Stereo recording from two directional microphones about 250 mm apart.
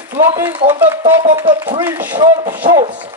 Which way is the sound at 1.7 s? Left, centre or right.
Centre.